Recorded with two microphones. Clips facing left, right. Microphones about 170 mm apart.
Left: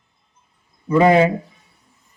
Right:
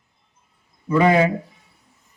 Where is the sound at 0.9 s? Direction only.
30° left (ahead or behind).